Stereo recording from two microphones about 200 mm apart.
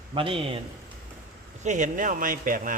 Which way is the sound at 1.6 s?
40° right (ahead or behind).